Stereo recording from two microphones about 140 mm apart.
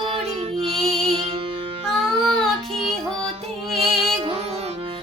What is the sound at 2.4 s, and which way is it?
Child singing, centre (ahead or behind).